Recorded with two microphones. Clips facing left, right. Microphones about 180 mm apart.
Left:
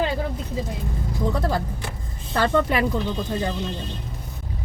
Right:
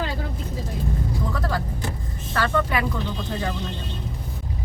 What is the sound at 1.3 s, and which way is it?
Speech, 20° left (ahead or behind).